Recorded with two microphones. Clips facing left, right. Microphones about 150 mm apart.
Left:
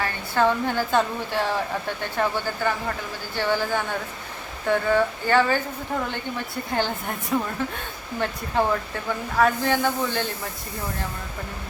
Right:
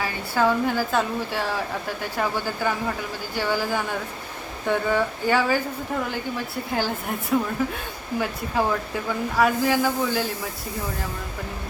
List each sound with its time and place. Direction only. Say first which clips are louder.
0.0 s a woman's voice: even; 5° right (ahead or behind)